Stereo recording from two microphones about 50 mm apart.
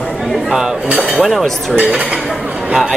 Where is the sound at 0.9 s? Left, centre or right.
Centre.